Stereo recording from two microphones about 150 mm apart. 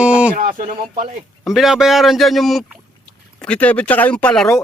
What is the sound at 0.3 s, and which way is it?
Speech, 65° right (ahead or behind).